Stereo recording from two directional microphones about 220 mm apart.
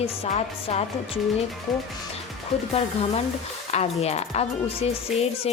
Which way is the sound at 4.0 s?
30° left (ahead or behind).